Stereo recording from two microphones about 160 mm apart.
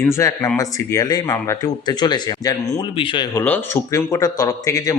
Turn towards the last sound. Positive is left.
turn(degrees=20)  # may be behind; listen again after turning